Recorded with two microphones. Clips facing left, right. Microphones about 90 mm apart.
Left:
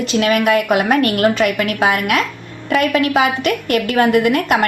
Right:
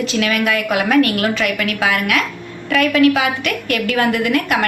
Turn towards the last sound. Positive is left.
turn(degrees=30)  # may be behind; listen again after turning